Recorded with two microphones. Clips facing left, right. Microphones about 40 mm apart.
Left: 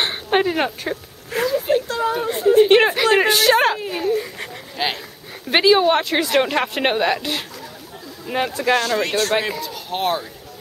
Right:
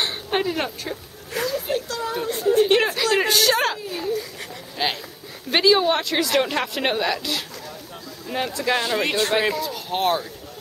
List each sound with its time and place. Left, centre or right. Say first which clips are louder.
0.0 s a sound: left 5 dB; left
2.2 s speech: left 4 dB; left
4.8 s a man's voice: left 1 dB; centre
5.5 s speech: left 3 dB; left
8.3 s speech: left 4 dB; centre
8.7 s speech: left 1 dB; centre
9.4 s a man's voice: right 2 dB; centre